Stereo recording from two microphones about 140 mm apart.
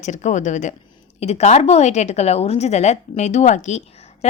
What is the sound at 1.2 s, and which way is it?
A woman's voice, 50° left (ahead or behind).